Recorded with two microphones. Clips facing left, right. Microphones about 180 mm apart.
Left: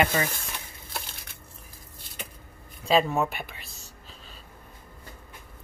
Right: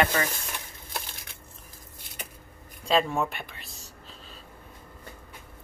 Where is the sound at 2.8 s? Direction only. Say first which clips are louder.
Left 2 dB; centre (ahead or behind).